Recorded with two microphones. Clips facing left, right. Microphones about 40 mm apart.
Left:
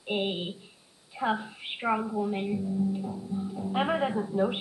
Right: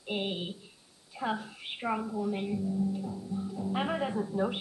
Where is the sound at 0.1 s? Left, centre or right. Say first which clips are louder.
Left 4 dB; left.